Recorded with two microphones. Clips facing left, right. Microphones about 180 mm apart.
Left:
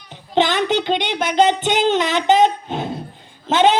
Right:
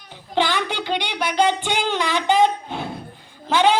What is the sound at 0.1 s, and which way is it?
A child's voice, 20° left (ahead or behind).